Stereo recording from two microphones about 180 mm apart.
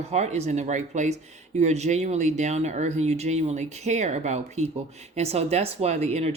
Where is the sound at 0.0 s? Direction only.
40° right (ahead or behind).